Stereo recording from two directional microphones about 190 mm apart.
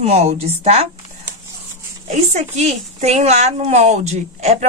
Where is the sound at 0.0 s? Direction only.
35° right (ahead or behind).